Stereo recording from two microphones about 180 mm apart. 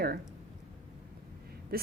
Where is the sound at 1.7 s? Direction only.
55° right (ahead or behind).